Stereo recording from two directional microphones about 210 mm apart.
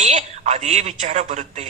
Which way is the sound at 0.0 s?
35° right (ahead or behind).